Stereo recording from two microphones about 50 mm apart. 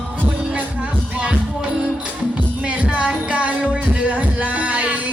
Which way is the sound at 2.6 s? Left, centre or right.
Right.